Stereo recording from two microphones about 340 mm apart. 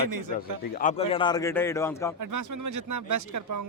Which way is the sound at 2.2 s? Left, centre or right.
Right.